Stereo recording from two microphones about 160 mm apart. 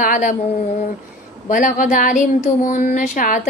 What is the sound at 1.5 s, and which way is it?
Music, 55° left (ahead or behind).